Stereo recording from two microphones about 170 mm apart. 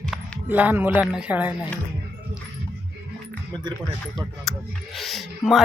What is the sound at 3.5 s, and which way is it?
Speech, 25° right (ahead or behind).